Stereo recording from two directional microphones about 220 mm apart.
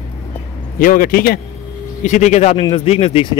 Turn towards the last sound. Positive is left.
turn(degrees=30)  # may be behind; listen again after turning